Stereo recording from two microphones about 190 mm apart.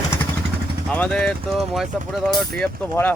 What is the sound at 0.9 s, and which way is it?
Speech, 5° left (ahead or behind).